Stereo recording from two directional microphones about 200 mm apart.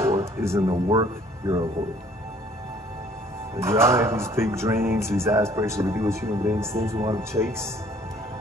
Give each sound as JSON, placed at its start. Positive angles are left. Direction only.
{"t": 0.0, "sound": "music", "side_deg": -15}
{"t": 0.7, "sound": "speech", "side_deg": -20}
{"t": 3.5, "sound": "speech", "side_deg": -15}